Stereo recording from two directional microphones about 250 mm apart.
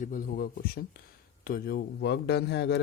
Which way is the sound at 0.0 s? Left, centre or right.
Left.